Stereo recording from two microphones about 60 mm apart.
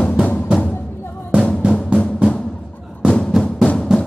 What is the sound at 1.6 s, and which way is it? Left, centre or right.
Music, centre.